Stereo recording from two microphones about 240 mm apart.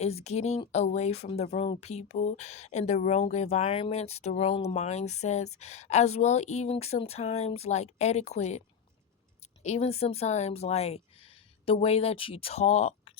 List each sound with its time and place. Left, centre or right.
0.0 s speech: left
9.6 s speech: left